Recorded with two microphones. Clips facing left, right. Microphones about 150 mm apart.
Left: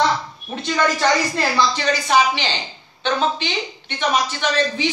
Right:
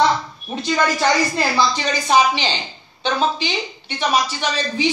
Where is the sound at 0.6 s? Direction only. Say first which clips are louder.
Right 1 dB; 10° right (ahead or behind).